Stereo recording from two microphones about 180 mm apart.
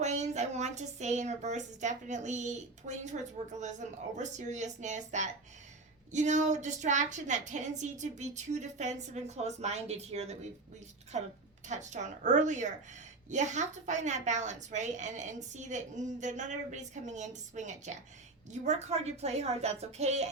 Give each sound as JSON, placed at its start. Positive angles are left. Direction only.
{"t": 0.0, "sound": "a woman's voice", "side_deg": -40}